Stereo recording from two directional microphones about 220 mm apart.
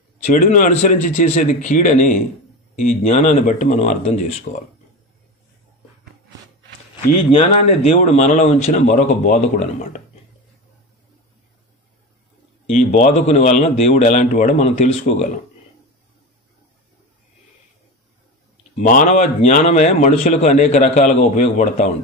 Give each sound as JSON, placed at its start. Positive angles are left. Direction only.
{"t": 0.2, "sound": "a man's voice", "side_deg": 35}
{"t": 7.9, "sound": "a man's voice", "side_deg": 30}
{"t": 12.9, "sound": "a man's voice", "side_deg": 35}
{"t": 18.8, "sound": "a man's voice", "side_deg": 35}